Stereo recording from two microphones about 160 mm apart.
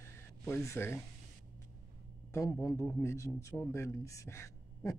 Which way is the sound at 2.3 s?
20° left (ahead or behind).